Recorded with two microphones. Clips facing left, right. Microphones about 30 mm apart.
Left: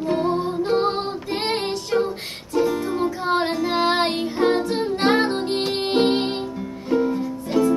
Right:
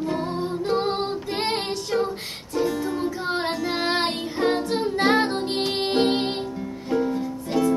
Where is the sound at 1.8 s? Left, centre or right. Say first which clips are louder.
Left 3 dB; left.